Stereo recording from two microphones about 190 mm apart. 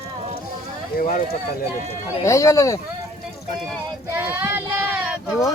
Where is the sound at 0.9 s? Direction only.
50° left (ahead or behind).